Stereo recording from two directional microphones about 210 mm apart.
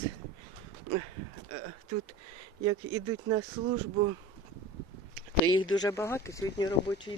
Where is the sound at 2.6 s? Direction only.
20° right (ahead or behind).